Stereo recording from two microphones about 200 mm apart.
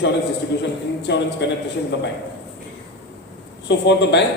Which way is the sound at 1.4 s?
65° left (ahead or behind).